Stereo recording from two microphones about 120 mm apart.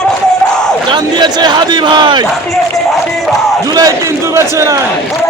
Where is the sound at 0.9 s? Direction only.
35° right (ahead or behind).